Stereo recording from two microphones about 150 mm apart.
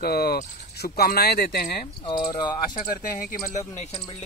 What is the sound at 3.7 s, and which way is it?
Speech, 45° left (ahead or behind).